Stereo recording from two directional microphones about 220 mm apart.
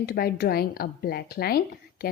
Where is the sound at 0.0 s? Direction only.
45° left (ahead or behind).